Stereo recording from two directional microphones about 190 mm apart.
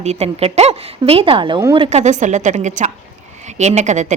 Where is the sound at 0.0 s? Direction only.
35° right (ahead or behind).